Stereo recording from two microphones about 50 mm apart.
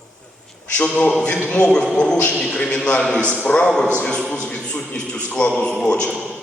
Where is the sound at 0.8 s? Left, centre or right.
Left.